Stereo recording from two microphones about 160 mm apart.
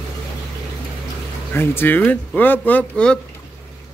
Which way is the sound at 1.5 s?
15° left (ahead or behind).